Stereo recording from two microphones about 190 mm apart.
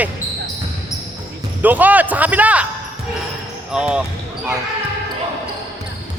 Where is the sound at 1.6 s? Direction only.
10° right (ahead or behind).